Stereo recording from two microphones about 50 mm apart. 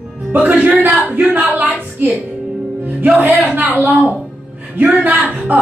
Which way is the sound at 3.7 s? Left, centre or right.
Right.